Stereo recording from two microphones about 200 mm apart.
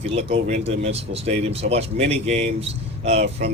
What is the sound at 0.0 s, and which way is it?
Speech, 30° right (ahead or behind).